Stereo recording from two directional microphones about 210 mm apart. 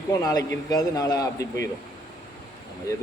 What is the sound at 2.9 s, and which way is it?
Speech, 15° left (ahead or behind).